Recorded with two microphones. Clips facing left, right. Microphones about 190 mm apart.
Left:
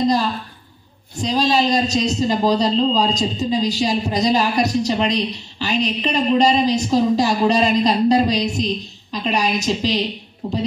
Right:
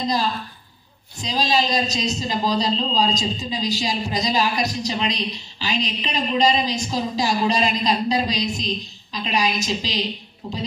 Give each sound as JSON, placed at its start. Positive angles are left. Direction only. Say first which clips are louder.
{"t": 1.2, "sound": "a man's voice", "louder": "left 4 dB", "side_deg": 60}